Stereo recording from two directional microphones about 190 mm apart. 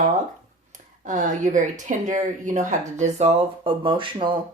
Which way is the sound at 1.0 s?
40° right (ahead or behind).